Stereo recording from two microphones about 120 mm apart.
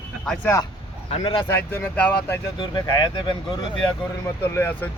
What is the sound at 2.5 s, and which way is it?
Speech, 35° left (ahead or behind).